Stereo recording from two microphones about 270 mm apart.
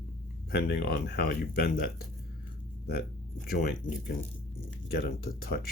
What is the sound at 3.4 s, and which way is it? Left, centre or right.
Speech, left.